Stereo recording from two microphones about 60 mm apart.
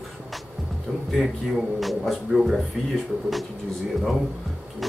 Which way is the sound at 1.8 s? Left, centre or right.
Centre.